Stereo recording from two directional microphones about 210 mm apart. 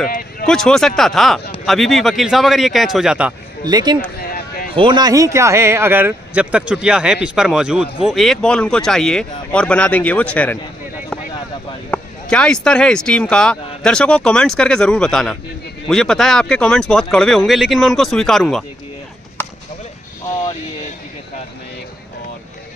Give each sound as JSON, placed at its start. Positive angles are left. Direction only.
{"t": 0.5, "sound": "speech", "side_deg": 0}
{"t": 3.6, "sound": "a man's voice", "side_deg": -20}
{"t": 11.9, "sound": "speech", "side_deg": 5}
{"t": 19.4, "sound": "chop", "side_deg": 10}
{"t": 20.2, "sound": "vehicle", "side_deg": 20}